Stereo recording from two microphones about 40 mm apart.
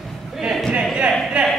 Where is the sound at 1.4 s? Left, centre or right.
Right.